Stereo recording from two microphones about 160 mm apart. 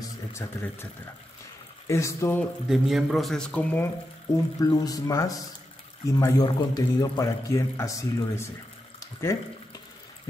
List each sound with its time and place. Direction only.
0.0 s speech: 15° left (ahead or behind)
1.9 s speech: 20° left (ahead or behind)
2.7 s a man's voice: centre (ahead or behind)
4.6 s speech: 20° left (ahead or behind)